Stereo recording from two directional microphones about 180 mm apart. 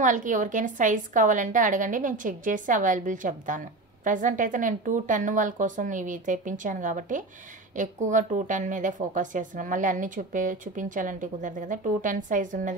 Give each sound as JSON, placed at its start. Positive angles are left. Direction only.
{"t": 0.0, "sound": "a woman's voice", "side_deg": -45}